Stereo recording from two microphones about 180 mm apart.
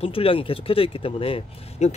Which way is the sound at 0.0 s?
30° left (ahead or behind).